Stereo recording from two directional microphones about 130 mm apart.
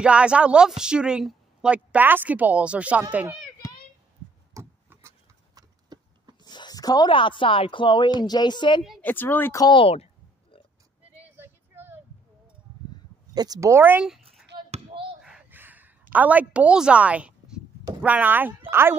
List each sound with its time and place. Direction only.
0.0 s a woman's voice: 10° right (ahead or behind)
4.6 s a sound: 20° right (ahead or behind)
6.4 s speech: 35° left (ahead or behind)
9.0 s speech: 15° left (ahead or behind)
9.6 s speech: 40° left (ahead or behind)
11.1 s child singing: 15° right (ahead or behind)
13.3 s speech: 30° right (ahead or behind)
15.2 s a sound: 10° right (ahead or behind)
18.0 s a woman's voice: 10° right (ahead or behind)